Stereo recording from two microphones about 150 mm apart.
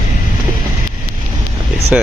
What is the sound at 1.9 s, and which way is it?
Speech, 5° right (ahead or behind).